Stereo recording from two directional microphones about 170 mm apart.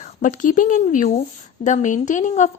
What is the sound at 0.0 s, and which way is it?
A woman's voice, 50° left (ahead or behind).